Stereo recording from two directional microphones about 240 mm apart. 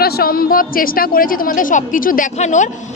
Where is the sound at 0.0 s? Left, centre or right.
Left.